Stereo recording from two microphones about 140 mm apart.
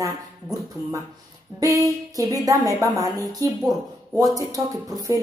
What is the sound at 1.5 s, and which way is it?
A woman's voice, 25° right (ahead or behind).